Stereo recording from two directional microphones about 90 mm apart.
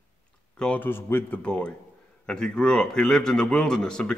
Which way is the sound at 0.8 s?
25° left (ahead or behind).